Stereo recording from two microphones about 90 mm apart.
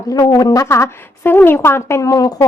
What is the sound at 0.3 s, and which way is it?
A woman's voice, 45° left (ahead or behind).